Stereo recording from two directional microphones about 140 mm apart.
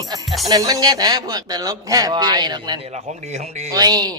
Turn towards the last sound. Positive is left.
turn(degrees=-30)  # may be behind; listen again after turning